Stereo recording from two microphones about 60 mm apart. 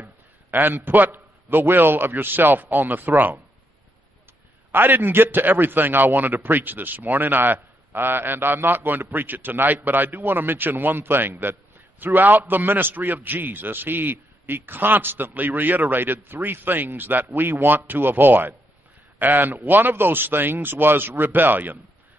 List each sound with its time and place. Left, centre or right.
0.0 s a man's voice: right
4.7 s a man's voice: right